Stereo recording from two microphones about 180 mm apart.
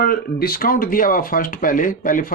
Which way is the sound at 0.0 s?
55° left (ahead or behind).